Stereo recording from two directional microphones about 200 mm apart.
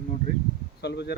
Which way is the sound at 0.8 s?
55° left (ahead or behind).